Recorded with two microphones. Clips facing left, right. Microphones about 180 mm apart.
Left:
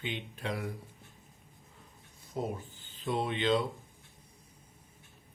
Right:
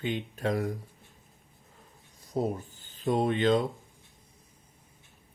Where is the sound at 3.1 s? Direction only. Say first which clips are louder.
Right 5 dB; 45° right (ahead or behind).